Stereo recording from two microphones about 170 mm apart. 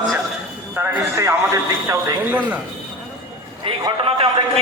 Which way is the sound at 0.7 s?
15° right (ahead or behind).